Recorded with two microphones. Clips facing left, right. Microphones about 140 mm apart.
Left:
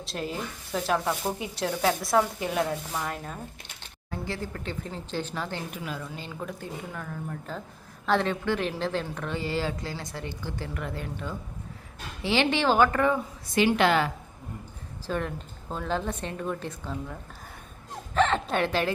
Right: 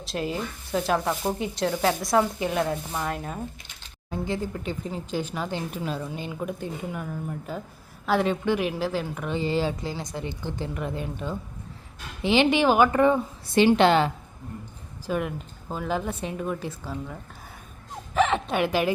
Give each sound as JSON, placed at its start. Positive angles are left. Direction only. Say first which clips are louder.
{"t": 0.0, "sound": "speech", "louder": "right 4 dB", "side_deg": 0}
{"t": 4.1, "sound": "a woman's voice", "louder": "right 5 dB", "side_deg": -15}
{"t": 5.7, "sound": "a woman's voice", "louder": "right 5 dB", "side_deg": -30}
{"t": 6.1, "sound": "a woman's voice", "louder": "right 5 dB", "side_deg": -15}
{"t": 15.0, "sound": "speech", "louder": "right 3 dB", "side_deg": -10}
{"t": 18.1, "sound": "a sound", "louder": "right 1 dB", "side_deg": -10}
{"t": 18.5, "sound": "a woman's voice", "louder": "right 4 dB", "side_deg": -10}